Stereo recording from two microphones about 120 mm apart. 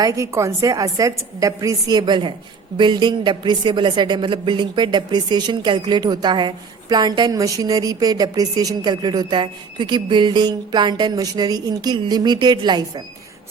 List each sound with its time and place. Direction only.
0.0 s a woman's voice: 25° right (ahead or behind)